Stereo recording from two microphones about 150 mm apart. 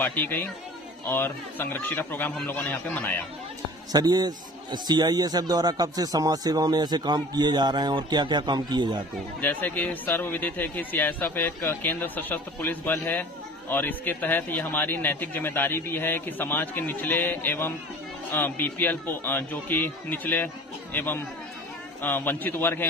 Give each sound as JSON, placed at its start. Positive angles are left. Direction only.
{"t": 0.0, "sound": "a man's voice", "side_deg": 15}
{"t": 3.9, "sound": "a man's voice", "side_deg": -25}
{"t": 9.4, "sound": "a man's voice", "side_deg": 10}